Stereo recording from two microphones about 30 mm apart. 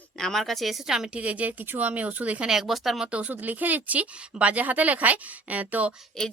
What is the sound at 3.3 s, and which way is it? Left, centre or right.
Speech, right.